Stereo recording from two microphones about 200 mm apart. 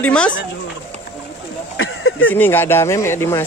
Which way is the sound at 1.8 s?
85° left.